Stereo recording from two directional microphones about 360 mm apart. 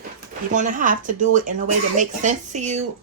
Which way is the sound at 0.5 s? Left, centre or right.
Right.